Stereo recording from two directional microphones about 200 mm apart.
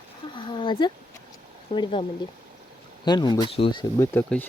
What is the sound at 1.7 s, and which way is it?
Speech, 25° left (ahead or behind).